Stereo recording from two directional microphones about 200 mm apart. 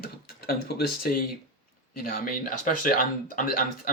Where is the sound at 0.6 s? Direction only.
50° left (ahead or behind).